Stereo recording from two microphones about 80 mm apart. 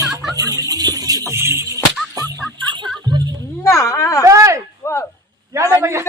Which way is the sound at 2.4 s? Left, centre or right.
Centre.